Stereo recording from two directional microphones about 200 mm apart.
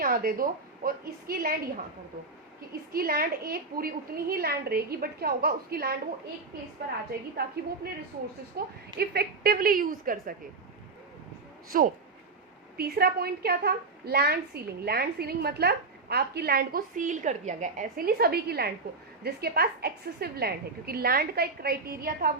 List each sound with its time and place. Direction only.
0.0 s a woman's voice: 45° right (ahead or behind)
2.9 s a woman's voice: 50° right (ahead or behind)
7.4 s a woman's voice: 50° right (ahead or behind)
11.7 s a woman's voice: 45° right (ahead or behind)